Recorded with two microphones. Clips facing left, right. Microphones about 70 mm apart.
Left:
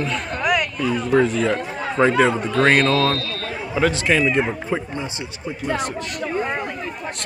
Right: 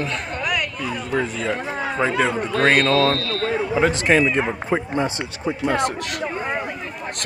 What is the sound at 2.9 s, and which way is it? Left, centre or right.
Speech, right.